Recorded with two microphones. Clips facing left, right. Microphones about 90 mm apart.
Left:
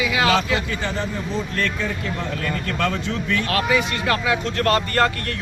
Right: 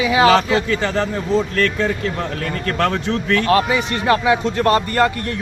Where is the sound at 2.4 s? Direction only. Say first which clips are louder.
Right 4 dB; 55° right (ahead or behind).